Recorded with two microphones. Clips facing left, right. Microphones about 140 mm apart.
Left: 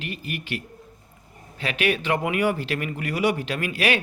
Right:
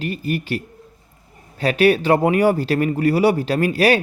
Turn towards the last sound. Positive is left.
turn(degrees=-40)  # may be behind; listen again after turning